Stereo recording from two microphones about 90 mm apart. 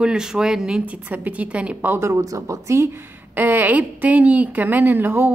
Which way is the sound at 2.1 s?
40° right (ahead or behind).